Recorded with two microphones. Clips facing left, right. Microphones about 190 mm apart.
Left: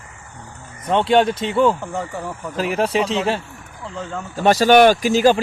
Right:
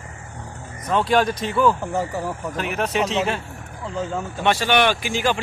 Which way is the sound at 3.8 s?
Centre (ahead or behind).